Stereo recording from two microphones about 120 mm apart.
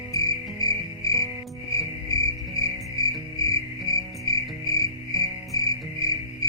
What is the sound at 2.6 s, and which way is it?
Cricket, 30° left (ahead or behind).